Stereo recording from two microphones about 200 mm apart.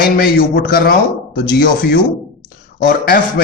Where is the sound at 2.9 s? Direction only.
50° left (ahead or behind).